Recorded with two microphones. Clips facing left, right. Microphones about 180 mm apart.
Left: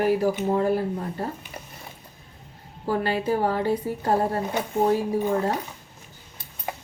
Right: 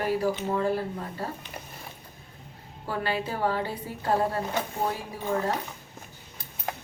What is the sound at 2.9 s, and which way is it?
A woman's voice, 45° left (ahead or behind).